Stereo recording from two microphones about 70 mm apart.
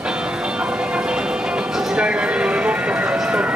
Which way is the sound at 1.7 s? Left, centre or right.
Centre.